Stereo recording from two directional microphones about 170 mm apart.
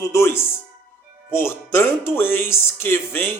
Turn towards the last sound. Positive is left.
turn(degrees=15)  # may be behind; listen again after turning